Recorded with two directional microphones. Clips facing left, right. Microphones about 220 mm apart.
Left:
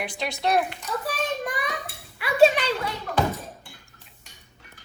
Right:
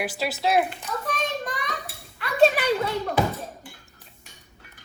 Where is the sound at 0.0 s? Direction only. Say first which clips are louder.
Right 2 dB; 5° right (ahead or behind).